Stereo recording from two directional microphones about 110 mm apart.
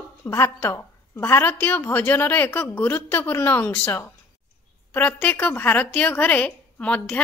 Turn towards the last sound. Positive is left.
turn(degrees=10)  # may be behind; listen again after turning